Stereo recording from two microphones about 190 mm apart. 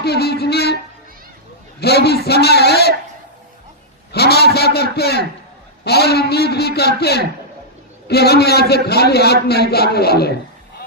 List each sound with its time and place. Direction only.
0.0 s a man's voice: 60° left (ahead or behind)
1.8 s a man's voice: 60° left (ahead or behind)
4.1 s a man's voice: 60° left (ahead or behind)